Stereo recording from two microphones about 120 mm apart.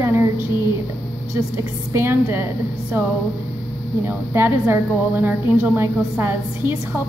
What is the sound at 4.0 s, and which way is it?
A woman's voice, 20° right (ahead or behind).